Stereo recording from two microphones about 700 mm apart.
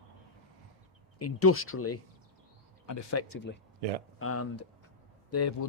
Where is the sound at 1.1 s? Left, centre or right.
Centre.